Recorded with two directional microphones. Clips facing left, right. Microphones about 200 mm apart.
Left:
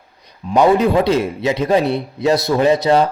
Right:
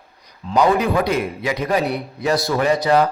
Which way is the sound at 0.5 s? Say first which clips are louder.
Left 4 dB; 25° left (ahead or behind).